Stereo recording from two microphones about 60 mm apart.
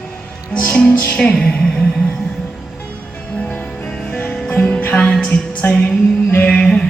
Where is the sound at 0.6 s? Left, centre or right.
Left.